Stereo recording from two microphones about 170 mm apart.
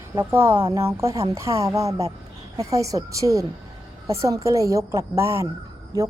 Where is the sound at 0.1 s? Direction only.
15° right (ahead or behind).